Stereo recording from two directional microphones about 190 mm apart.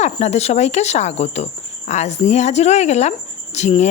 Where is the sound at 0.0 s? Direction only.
35° left (ahead or behind).